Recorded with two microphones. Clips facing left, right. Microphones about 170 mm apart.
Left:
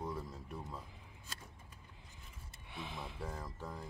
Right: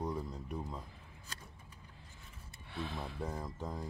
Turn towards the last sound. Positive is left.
turn(degrees=-20)  # may be behind; listen again after turning